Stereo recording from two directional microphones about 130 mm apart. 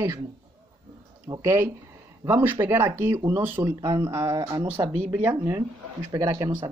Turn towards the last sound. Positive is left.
turn(degrees=-25)  # may be behind; listen again after turning